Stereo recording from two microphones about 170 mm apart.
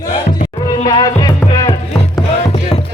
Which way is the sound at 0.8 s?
25° left (ahead or behind).